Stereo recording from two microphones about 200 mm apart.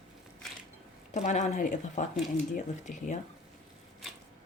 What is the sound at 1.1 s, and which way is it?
Speech, 35° left (ahead or behind).